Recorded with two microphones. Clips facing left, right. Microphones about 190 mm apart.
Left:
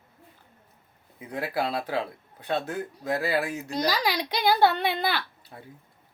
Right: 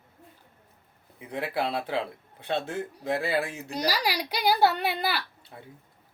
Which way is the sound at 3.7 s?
10° right (ahead or behind).